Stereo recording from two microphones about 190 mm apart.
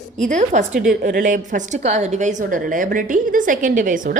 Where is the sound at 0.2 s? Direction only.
40° right (ahead or behind).